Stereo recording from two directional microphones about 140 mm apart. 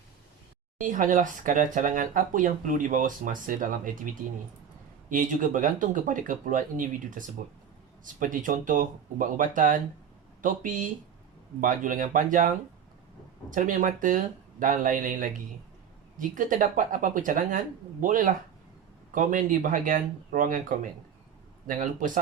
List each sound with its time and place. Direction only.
0.8 s speech: 70° right (ahead or behind)
13.5 s speech: 70° right (ahead or behind)